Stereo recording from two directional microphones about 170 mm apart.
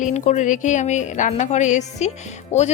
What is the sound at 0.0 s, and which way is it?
A woman's voice, 45° left (ahead or behind).